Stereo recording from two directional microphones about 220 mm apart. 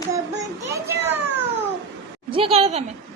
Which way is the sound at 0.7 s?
10° right (ahead or behind).